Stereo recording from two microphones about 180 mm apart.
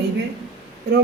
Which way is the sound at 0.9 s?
70° right (ahead or behind).